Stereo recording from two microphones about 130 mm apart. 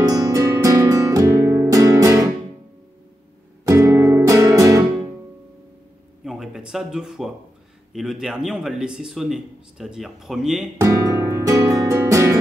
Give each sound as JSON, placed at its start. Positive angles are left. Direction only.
{"t": 0.0, "sound": "music", "side_deg": -30}
{"t": 3.6, "sound": "music", "side_deg": -20}
{"t": 6.2, "sound": "a sound", "side_deg": -5}
{"t": 7.9, "sound": "a man's voice", "side_deg": -5}
{"t": 10.8, "sound": "music", "side_deg": -25}